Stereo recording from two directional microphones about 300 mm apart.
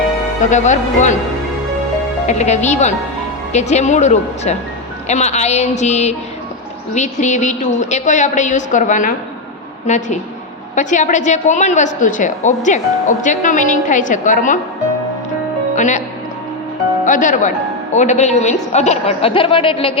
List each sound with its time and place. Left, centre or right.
0.5 s a woman's voice: left
2.2 s a woman's voice: left
15.7 s speech: left
17.1 s a woman's voice: left